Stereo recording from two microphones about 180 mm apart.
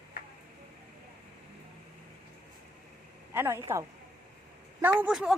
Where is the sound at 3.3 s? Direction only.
15° right (ahead or behind).